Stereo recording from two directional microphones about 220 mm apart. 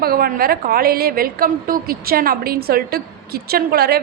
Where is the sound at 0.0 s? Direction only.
45° right (ahead or behind).